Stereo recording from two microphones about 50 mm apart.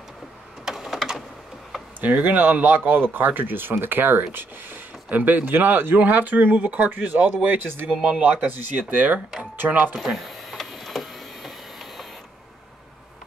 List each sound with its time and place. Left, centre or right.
0.7 s typing: centre
2.0 s speech: right
8.0 s speech: right
9.9 s printer: centre